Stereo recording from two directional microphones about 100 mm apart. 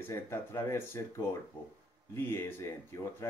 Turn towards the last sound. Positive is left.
turn(degrees=30)  # may be behind; listen again after turning